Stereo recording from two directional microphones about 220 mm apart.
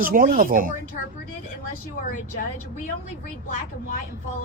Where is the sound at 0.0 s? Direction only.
40° right (ahead or behind).